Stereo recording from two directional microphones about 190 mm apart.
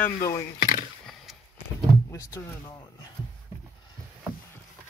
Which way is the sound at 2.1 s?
15° left (ahead or behind).